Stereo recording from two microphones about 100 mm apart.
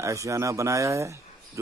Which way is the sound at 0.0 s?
30° right (ahead or behind).